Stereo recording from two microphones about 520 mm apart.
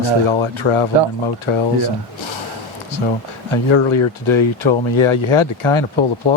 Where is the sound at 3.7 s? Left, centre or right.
Left.